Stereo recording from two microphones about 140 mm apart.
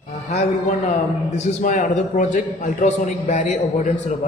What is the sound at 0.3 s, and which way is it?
A man's voice, 55° left (ahead or behind).